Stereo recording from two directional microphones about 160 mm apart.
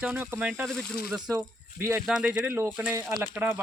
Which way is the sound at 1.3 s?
20° right (ahead or behind).